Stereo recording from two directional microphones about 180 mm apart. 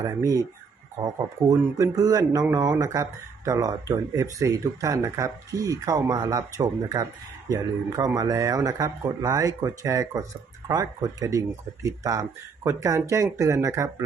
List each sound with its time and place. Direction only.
0.0 s speech: 15° right (ahead or behind)